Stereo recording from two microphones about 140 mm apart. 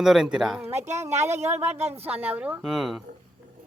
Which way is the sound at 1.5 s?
15° right (ahead or behind).